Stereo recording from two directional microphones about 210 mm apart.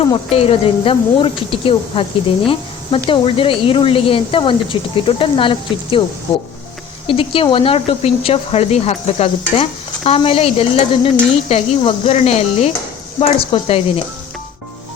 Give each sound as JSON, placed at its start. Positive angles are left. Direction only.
{"t": 0.0, "sound": "speech", "side_deg": 25}
{"t": 3.1, "sound": "speech", "side_deg": 25}
{"t": 7.1, "sound": "speech", "side_deg": 25}